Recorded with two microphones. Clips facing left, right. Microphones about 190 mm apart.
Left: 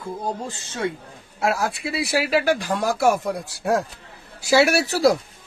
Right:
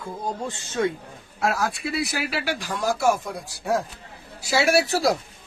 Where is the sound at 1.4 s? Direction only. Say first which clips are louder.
Left 2 dB; 30° left (ahead or behind).